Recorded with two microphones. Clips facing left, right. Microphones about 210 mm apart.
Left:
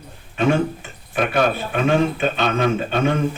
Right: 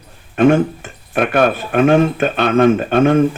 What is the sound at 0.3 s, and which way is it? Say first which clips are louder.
Speech: right 7 dB; 55° right (ahead or behind).